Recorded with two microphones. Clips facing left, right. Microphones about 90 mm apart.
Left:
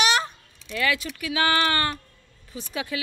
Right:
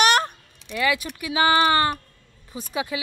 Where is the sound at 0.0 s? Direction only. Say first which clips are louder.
Right 4 dB; 50° right (ahead or behind).